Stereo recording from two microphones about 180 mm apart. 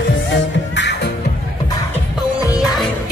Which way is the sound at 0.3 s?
75° left (ahead or behind).